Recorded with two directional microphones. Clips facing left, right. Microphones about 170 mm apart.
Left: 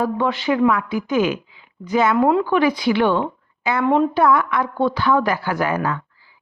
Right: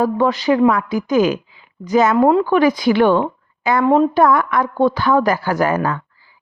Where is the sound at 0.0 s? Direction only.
40° right (ahead or behind).